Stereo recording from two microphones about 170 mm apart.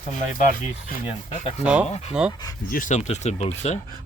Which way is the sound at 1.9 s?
40° left (ahead or behind).